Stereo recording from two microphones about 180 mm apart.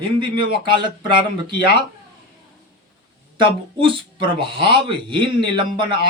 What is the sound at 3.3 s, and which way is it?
A man's voice, 30° right (ahead or behind).